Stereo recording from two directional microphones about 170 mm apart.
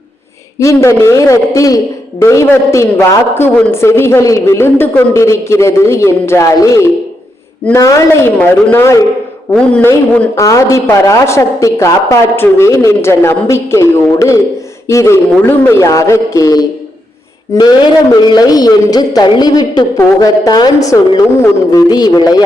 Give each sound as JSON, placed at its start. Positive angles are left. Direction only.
{"t": 0.6, "sound": "a man's voice", "side_deg": 15}